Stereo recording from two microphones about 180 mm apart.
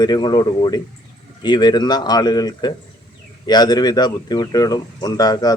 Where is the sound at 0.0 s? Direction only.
25° left (ahead or behind).